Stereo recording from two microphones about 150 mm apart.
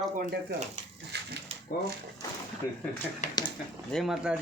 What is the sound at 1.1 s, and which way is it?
Speech, 90° right.